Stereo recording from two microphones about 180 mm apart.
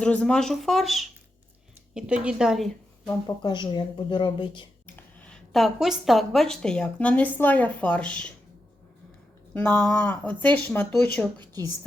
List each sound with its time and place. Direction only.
0.0 s speech: 5° left (ahead or behind)
3.1 s a woman's voice: 20° left (ahead or behind)
4.9 s a woman's voice: 5° left (ahead or behind)
9.6 s a woman's voice: 5° left (ahead or behind)
11.3 s a woman's voice: 20° right (ahead or behind)